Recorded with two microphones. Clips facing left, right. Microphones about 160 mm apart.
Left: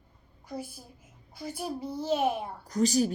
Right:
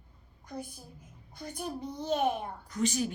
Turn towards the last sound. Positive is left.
turn(degrees=35)  # may be behind; listen again after turning